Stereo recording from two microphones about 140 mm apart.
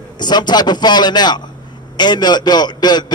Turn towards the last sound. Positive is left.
turn(degrees=30)  # may be behind; listen again after turning